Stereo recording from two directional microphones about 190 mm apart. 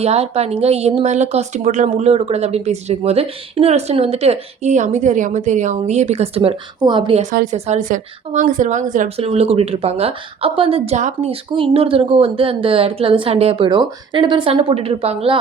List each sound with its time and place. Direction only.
0.0 s speech: 35° right (ahead or behind)
7.2 s a woman's voice: 40° right (ahead or behind)